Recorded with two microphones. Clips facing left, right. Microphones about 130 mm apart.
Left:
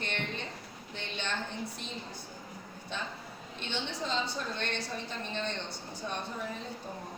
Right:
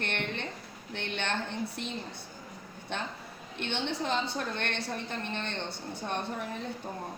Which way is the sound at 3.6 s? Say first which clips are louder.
Right 4 dB; 60° right (ahead or behind).